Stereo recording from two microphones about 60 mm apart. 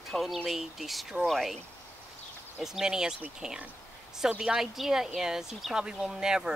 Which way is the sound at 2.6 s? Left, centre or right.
Centre.